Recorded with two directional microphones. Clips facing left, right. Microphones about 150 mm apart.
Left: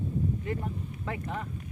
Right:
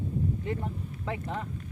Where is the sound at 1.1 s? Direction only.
20° right (ahead or behind).